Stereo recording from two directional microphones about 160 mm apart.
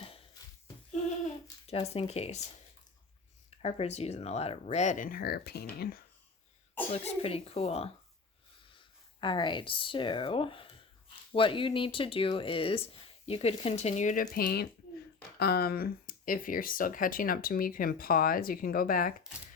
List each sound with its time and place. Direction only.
0.0 s a sound: 35° left (ahead or behind)
1.9 s speech: 40° left (ahead or behind)
3.6 s speech: 40° left (ahead or behind); by 5.6 s 85° left
6.9 s speech: 40° left (ahead or behind)
9.2 s speech: 30° left (ahead or behind); by 19.1 s 60° left (ahead or behind)